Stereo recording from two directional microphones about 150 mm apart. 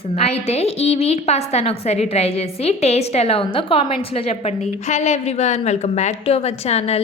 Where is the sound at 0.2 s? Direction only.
40° left (ahead or behind).